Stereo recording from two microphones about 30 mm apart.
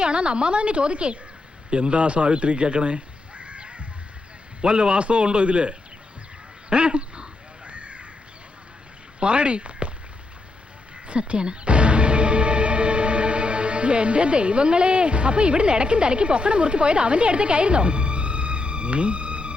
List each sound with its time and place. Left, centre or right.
0.0 s a woman's voice: right
4.6 s a woman's voice: right
6.7 s crow: right
9.2 s a woman's voice: right
11.1 s speech: right